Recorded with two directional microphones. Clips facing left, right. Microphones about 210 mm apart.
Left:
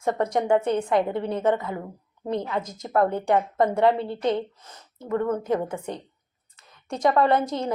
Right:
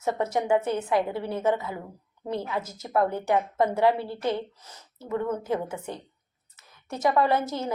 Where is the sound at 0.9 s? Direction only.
20° left (ahead or behind).